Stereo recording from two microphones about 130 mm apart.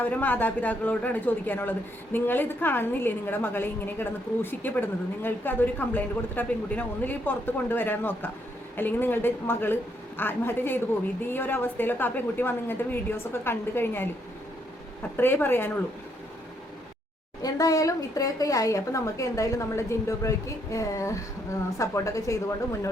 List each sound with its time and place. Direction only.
0.0 s speech: 15° left (ahead or behind)
15.1 s speech: 15° left (ahead or behind)
17.4 s a woman's voice: 25° left (ahead or behind)